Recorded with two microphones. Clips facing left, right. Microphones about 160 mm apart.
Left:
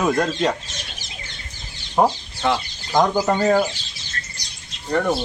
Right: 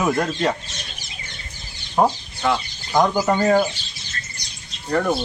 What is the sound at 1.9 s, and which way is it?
Speech, 5° left (ahead or behind).